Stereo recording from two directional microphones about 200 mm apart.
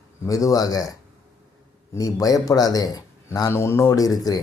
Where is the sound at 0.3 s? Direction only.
15° left (ahead or behind).